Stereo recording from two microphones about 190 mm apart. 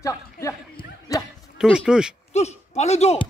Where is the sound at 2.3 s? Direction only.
35° left (ahead or behind).